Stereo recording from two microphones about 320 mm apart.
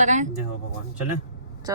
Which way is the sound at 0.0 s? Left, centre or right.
Right.